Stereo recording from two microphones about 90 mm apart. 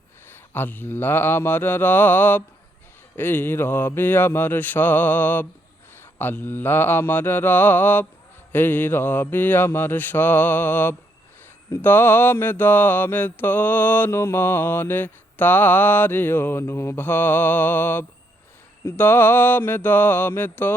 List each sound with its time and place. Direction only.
0.5 s mantra: 20° left (ahead or behind)